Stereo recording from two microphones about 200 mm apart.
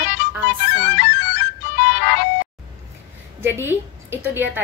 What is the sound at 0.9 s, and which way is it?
Music, 60° left (ahead or behind).